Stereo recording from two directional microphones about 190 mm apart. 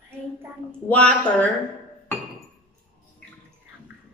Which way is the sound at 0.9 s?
10° left (ahead or behind).